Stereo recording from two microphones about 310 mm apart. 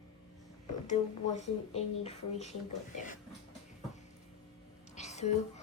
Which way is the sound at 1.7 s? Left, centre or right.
Centre.